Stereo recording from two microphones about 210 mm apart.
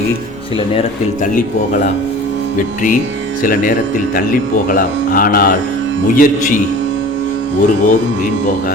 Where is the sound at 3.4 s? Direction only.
40° left (ahead or behind).